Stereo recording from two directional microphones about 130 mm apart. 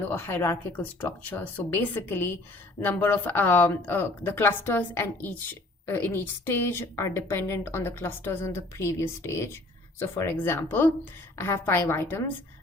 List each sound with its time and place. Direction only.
0.1 s a woman's voice: 20° left (ahead or behind)